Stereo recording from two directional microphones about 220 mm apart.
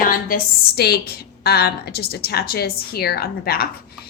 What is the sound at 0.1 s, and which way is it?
Speech, 40° left (ahead or behind).